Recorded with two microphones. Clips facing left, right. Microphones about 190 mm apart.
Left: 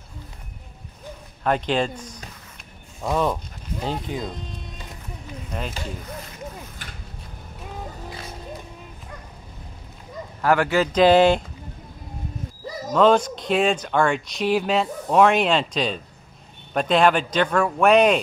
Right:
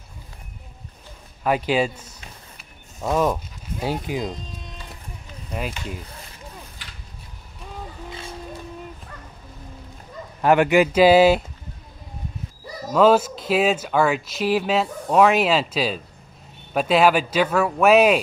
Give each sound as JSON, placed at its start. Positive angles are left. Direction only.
{"t": 1.4, "sound": "speech", "side_deg": -5}
{"t": 2.5, "sound": "a sound", "side_deg": -5}
{"t": 5.5, "sound": "speech", "side_deg": -5}
{"t": 6.8, "sound": "a sound", "side_deg": 50}
{"t": 8.1, "sound": "music", "side_deg": -25}
{"t": 10.4, "sound": "speech", "side_deg": -20}
{"t": 12.9, "sound": "speech", "side_deg": -5}